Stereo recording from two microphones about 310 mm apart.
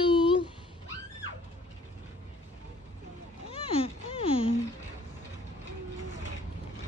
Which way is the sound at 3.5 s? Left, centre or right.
Centre.